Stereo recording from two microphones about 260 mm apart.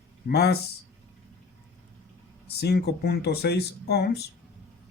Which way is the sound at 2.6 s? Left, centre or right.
Left.